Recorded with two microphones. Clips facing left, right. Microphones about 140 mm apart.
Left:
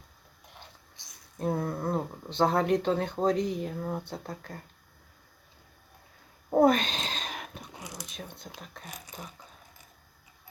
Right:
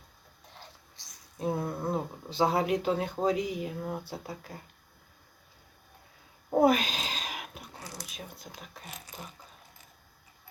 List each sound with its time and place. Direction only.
1.4 s speech: 5° right (ahead or behind)
6.5 s owl: 5° right (ahead or behind)
7.7 s a sound: 15° left (ahead or behind)
8.0 s speech: 5° right (ahead or behind)